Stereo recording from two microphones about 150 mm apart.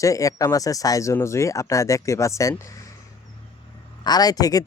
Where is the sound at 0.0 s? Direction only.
20° left (ahead or behind).